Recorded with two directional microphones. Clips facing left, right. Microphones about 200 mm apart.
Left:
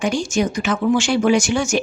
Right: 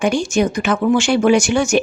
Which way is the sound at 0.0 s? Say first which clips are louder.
Right 3 dB; 60° right (ahead or behind).